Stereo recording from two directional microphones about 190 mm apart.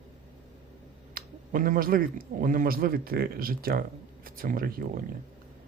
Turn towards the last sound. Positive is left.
turn(degrees=-50)  # may be behind; listen again after turning